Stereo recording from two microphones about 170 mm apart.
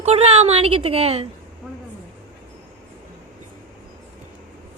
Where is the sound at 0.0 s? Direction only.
40° right (ahead or behind).